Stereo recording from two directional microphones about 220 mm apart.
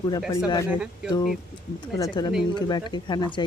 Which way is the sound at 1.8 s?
20° left (ahead or behind).